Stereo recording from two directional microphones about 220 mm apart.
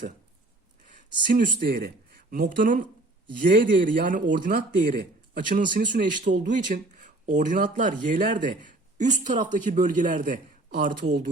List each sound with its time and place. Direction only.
1.3 s speech: 40° right (ahead or behind)